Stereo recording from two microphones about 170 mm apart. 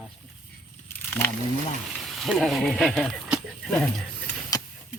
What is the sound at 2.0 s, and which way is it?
Speech, centre (ahead or behind).